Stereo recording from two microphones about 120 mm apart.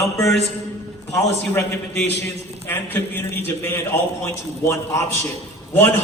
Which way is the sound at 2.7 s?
15° left (ahead or behind).